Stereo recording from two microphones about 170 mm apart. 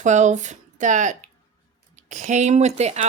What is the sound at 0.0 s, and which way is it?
Speech, 45° right (ahead or behind).